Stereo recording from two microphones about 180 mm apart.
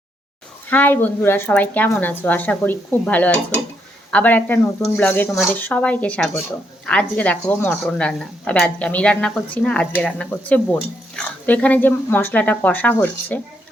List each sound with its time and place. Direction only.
0.7 s a woman's voice: 10° left (ahead or behind)